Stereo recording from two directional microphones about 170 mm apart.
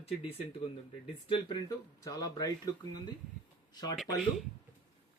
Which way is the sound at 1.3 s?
25° left (ahead or behind).